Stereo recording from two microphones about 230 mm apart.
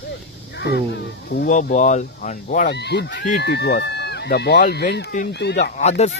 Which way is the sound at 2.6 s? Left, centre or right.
Left.